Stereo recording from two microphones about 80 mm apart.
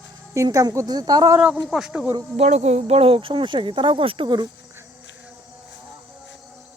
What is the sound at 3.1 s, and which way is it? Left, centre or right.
Speech, right.